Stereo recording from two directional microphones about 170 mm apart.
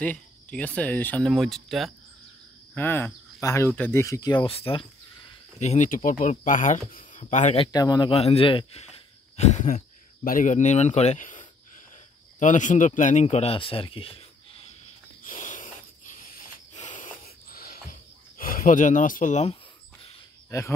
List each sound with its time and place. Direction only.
0.0 s speech: 10° left (ahead or behind)
2.7 s speech: 10° left (ahead or behind); by 4.8 s 35° left (ahead or behind)
5.6 s speech: 45° left (ahead or behind)
7.5 s speech: 25° left (ahead or behind)
9.4 s a man's voice: 45° left (ahead or behind)
15.2 s a sound: 50° left (ahead or behind)
18.4 s speech: 55° left (ahead or behind)
20.4 s speech: 15° left (ahead or behind)